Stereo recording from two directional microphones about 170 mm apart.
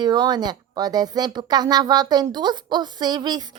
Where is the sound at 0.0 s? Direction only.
25° right (ahead or behind).